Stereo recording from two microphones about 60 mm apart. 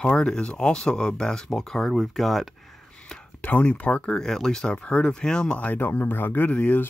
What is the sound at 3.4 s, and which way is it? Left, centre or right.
Speech, left.